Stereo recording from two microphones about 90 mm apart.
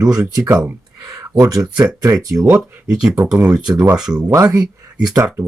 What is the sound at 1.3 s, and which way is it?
Speech, 40° right (ahead or behind).